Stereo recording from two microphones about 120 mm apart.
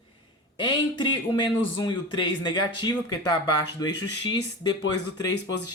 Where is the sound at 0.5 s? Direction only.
40° left (ahead or behind).